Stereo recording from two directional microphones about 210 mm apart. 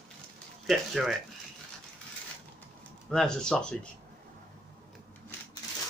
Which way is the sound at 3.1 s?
5° left (ahead or behind).